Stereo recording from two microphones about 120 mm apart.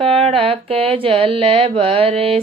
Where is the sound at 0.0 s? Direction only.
55° right (ahead or behind).